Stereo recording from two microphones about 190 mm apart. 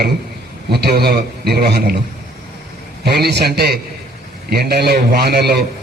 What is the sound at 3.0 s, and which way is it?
A man's voice, 60° right (ahead or behind).